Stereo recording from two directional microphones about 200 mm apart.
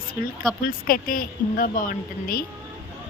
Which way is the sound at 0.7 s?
45° left (ahead or behind).